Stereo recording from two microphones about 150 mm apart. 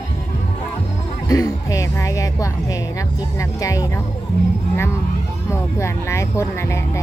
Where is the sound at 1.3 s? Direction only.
20° left (ahead or behind).